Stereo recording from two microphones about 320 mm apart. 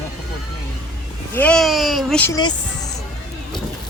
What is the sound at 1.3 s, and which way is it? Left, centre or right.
Speech, centre.